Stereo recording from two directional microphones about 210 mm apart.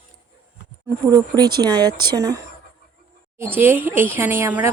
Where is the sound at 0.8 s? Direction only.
20° right (ahead or behind).